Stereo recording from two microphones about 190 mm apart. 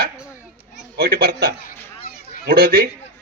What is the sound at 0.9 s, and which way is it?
A man's voice, 50° right (ahead or behind).